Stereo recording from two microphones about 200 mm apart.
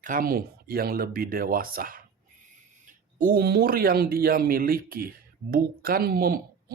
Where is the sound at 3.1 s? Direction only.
45° right (ahead or behind).